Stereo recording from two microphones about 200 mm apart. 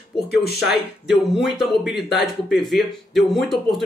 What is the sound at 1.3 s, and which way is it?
Speech, centre (ahead or behind).